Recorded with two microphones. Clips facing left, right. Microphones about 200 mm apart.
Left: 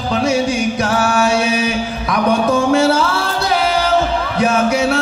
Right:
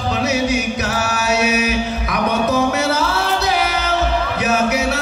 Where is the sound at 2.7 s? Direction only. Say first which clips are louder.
Left 5 dB; 30° left (ahead or behind).